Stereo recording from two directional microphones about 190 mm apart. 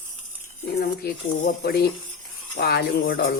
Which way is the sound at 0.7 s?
50° left (ahead or behind).